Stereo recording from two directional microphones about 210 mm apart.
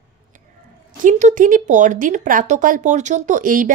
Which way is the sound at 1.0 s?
40° right (ahead or behind).